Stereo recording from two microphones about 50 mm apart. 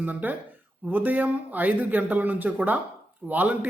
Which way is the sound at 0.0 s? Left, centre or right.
Right.